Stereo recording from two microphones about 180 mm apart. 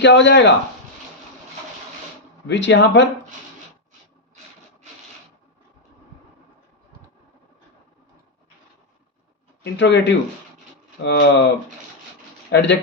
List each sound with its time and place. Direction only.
0.0 s speech: 75° left (ahead or behind)
2.5 s speech: 80° left
9.7 s speech: 75° left (ahead or behind)
11.0 s speech: 70° left (ahead or behind)
12.5 s speech: 75° left (ahead or behind)